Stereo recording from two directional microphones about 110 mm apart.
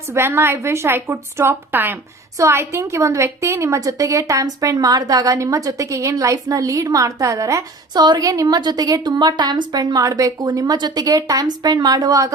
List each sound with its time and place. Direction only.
0.1 s a woman's voice: 20° right (ahead or behind)